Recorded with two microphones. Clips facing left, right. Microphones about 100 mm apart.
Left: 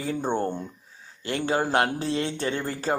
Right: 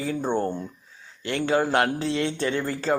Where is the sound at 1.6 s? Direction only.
30° left (ahead or behind).